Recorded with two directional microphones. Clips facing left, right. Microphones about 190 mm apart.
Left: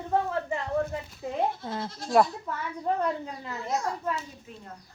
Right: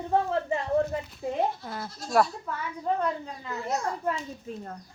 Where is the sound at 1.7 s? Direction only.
25° left (ahead or behind).